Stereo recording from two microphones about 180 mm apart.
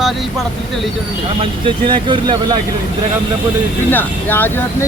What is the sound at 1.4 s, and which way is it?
Speech, 25° right (ahead or behind).